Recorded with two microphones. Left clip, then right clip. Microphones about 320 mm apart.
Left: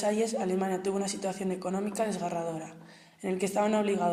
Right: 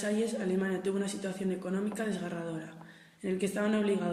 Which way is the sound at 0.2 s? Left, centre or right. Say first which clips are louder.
Left 3 dB; centre.